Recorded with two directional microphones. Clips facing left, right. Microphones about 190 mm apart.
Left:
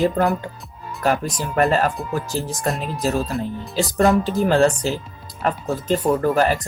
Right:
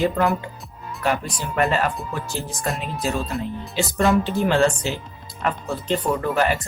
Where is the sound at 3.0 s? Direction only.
40° left (ahead or behind).